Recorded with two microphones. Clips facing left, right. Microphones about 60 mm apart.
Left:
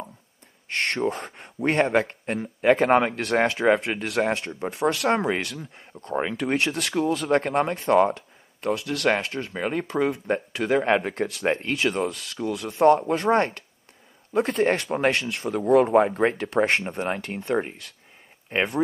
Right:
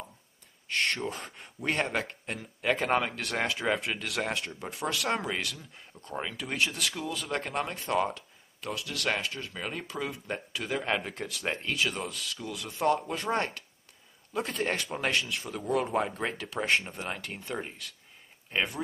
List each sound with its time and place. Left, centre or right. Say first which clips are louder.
0.7 s speech: left 5 dB; left
6.3 s speech: left 4 dB; left